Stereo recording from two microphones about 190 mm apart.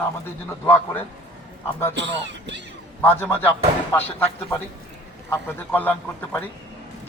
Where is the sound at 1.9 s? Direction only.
70° right (ahead or behind).